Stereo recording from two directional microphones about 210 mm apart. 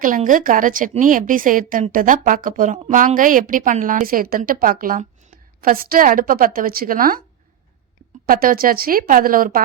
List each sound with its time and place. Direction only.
0.0 s a woman's voice: 40° right (ahead or behind)
8.3 s a woman's voice: 45° right (ahead or behind)